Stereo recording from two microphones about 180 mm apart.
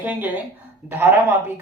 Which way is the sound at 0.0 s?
10° right (ahead or behind).